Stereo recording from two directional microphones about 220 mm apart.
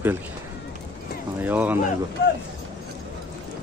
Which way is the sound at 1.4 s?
10° right (ahead or behind).